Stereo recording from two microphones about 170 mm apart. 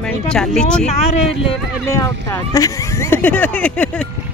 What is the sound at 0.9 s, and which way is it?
Speech, 40° left (ahead or behind).